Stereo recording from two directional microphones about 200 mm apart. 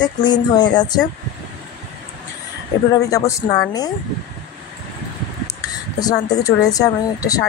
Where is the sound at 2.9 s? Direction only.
15° left (ahead or behind).